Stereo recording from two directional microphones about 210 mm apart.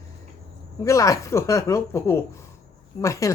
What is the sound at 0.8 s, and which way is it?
Speech, 15° left (ahead or behind).